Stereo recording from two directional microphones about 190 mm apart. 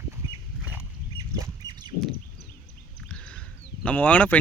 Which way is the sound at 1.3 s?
20° right (ahead or behind).